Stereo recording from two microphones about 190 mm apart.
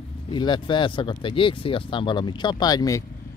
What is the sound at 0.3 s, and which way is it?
Speech, 25° left (ahead or behind).